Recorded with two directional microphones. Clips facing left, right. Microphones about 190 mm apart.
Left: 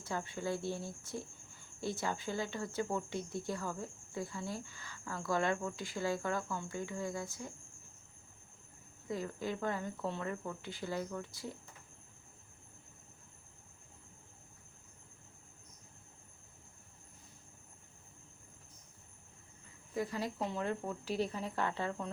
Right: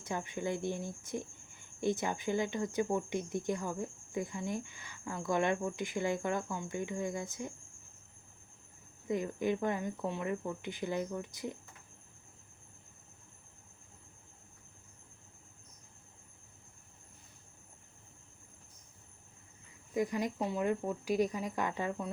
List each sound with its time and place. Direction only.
0.0 s speech: 20° right (ahead or behind)
9.0 s speech: 20° right (ahead or behind)
19.9 s speech: 15° right (ahead or behind)